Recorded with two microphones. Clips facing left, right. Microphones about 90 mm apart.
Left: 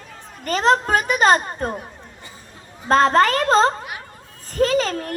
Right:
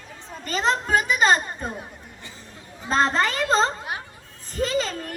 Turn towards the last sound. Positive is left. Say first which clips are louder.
# left 5 dB
turn(degrees=55)  # may be behind; listen again after turning